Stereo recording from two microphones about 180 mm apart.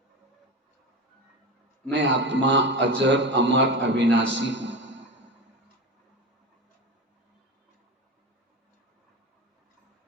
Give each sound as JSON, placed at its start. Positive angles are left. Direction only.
{"t": 1.9, "sound": "a man's voice", "side_deg": -85}